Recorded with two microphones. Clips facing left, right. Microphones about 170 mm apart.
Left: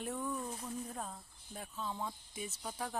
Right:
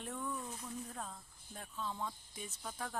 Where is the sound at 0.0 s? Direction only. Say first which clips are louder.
Left 3 dB; 10° left (ahead or behind).